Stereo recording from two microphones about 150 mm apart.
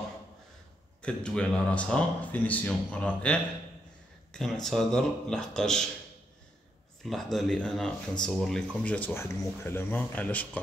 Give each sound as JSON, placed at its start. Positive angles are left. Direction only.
{"t": 1.0, "sound": "a man's voice", "side_deg": 5}
{"t": 7.1, "sound": "a man's voice", "side_deg": 0}